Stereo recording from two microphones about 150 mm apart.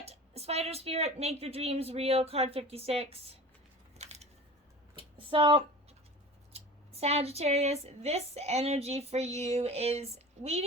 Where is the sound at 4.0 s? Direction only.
50° right (ahead or behind).